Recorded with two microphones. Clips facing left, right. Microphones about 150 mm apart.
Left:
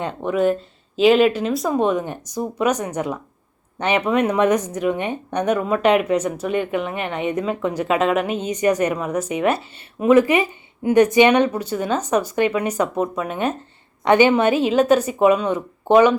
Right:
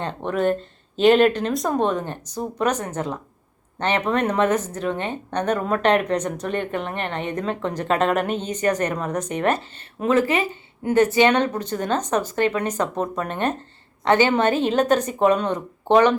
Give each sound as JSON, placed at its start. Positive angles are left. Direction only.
{"t": 0.0, "sound": "speech", "side_deg": 10}